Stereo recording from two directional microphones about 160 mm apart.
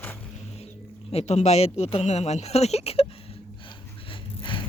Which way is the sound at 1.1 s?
40° left (ahead or behind).